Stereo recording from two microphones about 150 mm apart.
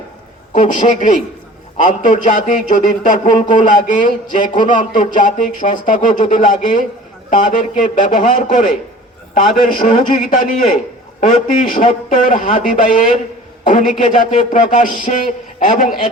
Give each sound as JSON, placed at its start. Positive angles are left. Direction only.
{"t": 0.5, "sound": "a man's voice", "side_deg": 60}